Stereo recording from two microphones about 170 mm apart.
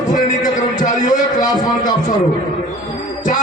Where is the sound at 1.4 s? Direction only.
20° left (ahead or behind).